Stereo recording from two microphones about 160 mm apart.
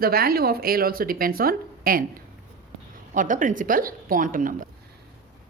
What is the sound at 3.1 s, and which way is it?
A woman's voice, 55° right (ahead or behind).